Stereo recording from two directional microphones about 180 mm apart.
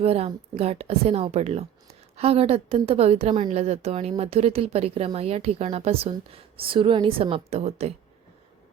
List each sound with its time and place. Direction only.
0.0 s speech: 35° right (ahead or behind)